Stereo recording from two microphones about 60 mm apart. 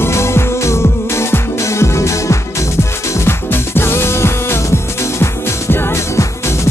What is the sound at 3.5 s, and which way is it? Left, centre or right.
Music, left.